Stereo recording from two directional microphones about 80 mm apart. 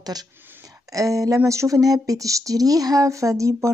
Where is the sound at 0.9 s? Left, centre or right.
Right.